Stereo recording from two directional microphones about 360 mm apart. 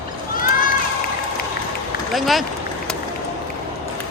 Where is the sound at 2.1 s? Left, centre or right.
Centre.